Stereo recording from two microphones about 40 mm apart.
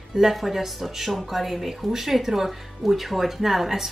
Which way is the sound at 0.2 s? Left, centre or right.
Centre.